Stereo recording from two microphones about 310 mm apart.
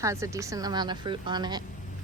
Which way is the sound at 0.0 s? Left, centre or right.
Centre.